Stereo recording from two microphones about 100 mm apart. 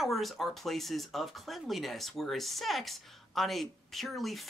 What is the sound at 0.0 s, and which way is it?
Speech, centre (ahead or behind).